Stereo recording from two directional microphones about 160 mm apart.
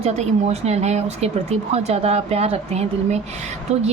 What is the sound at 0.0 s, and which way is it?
Speech, 40° right (ahead or behind).